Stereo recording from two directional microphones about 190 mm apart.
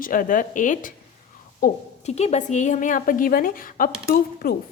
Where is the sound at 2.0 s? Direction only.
35° left (ahead or behind); by 4.6 s 55° left (ahead or behind).